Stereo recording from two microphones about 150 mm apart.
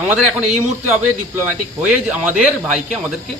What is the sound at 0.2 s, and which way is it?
Speech, 5° right (ahead or behind).